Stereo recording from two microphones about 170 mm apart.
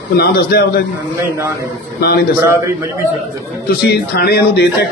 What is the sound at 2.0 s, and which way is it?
Speech, 65° left (ahead or behind).